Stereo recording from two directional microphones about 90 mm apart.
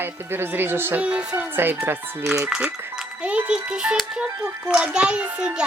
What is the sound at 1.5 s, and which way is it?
Speech, 25° right (ahead or behind).